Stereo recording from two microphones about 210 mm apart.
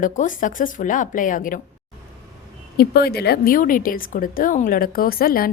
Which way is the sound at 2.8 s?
50° left (ahead or behind).